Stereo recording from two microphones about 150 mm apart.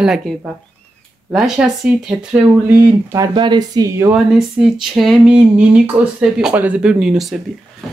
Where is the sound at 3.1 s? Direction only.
25° right (ahead or behind).